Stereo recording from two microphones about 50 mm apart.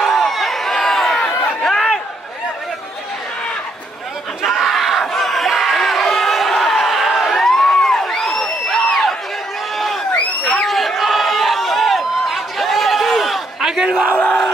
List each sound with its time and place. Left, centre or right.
0.0 s a sound: centre
1.2 s chatter: centre
4.4 s crowd: centre
10.1 s crowd: left
10.5 s a sound: centre
13.6 s battle cry: centre
14.1 s crowd: left